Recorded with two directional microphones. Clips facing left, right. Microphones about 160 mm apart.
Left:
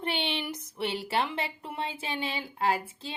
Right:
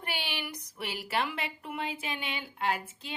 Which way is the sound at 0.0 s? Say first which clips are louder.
Left 6 dB; 25° left (ahead or behind).